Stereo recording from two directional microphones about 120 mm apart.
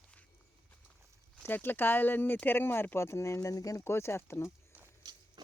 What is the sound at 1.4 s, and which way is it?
Speech, 15° left (ahead or behind).